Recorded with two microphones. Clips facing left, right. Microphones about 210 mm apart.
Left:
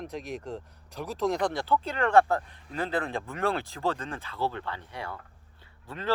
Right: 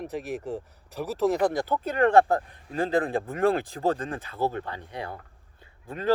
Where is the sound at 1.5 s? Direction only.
45° right (ahead or behind).